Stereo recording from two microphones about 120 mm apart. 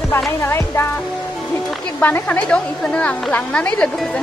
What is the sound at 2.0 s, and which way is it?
A woman's voice, 15° left (ahead or behind).